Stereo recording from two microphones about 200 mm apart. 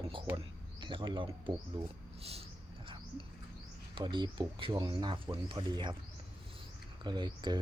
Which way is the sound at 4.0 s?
25° right (ahead or behind).